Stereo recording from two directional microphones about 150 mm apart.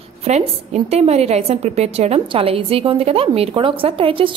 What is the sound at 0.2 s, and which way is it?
A woman's voice, 45° right (ahead or behind).